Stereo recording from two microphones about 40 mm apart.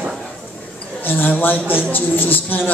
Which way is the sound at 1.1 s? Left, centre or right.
Left.